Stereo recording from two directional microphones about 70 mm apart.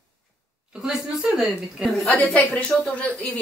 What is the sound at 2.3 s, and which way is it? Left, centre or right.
Speech, centre.